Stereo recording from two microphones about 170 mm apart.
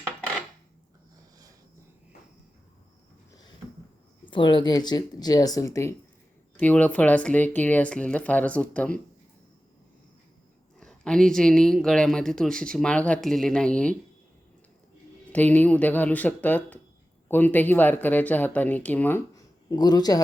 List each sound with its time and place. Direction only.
4.3 s speech: 30° left (ahead or behind); by 9.0 s 5° left (ahead or behind)
10.8 s speech: 5° left (ahead or behind)
15.3 s speech: 10° left (ahead or behind)